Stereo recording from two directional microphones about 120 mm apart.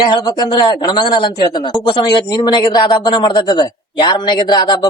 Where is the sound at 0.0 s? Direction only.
35° left (ahead or behind).